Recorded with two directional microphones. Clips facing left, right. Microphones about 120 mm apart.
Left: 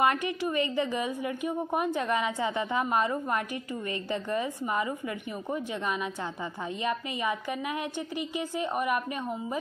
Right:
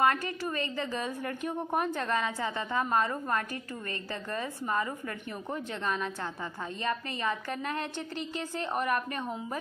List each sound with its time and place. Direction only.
0.0 s a woman's voice: 15° left (ahead or behind)
6.8 s a woman's voice: 15° left (ahead or behind)